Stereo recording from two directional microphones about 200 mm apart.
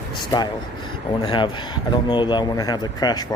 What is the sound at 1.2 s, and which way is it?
Speech, 25° left (ahead or behind).